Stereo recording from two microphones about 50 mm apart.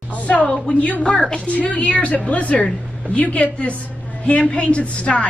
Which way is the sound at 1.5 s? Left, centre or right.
Left.